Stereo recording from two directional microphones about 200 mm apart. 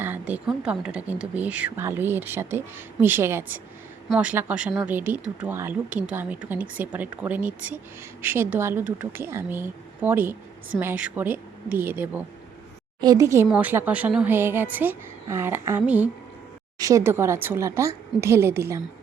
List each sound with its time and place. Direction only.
0.0 s a woman's voice: 10° right (ahead or behind)